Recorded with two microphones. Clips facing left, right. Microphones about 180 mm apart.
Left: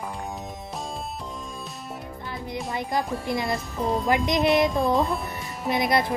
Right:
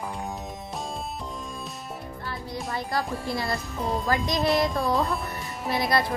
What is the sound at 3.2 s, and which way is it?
Speech, 20° left (ahead or behind).